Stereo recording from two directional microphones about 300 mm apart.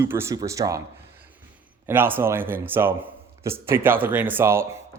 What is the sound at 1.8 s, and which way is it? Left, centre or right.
Speech, centre.